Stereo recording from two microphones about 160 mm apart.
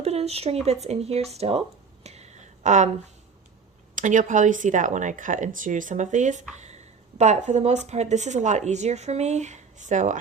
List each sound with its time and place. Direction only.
0.0 s speech: 40° right (ahead or behind)
2.0 s a sound: 45° right (ahead or behind)
3.9 s speech: 50° right (ahead or behind)